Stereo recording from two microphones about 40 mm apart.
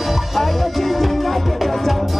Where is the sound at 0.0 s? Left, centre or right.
Centre.